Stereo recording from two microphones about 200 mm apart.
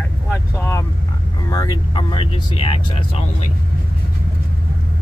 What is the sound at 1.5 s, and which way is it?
Speech, 20° left (ahead or behind).